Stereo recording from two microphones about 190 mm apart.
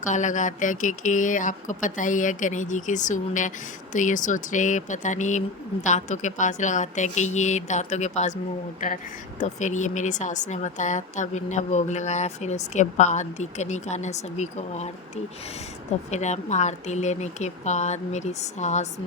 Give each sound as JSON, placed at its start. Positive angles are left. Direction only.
{"t": 0.0, "sound": "speech", "side_deg": 40}
{"t": 9.4, "sound": "speech", "side_deg": 40}
{"t": 16.0, "sound": "speech", "side_deg": 35}